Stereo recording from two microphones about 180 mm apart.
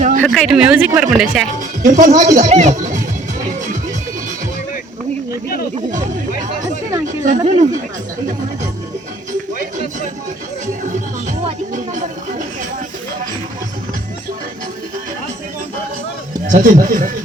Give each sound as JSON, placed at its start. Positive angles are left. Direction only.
{"t": 0.3, "sound": "speech", "side_deg": 0}
{"t": 1.8, "sound": "speech", "side_deg": -45}
{"t": 7.3, "sound": "speech", "side_deg": -40}
{"t": 11.3, "sound": "music", "side_deg": -45}
{"t": 16.5, "sound": "speech", "side_deg": -45}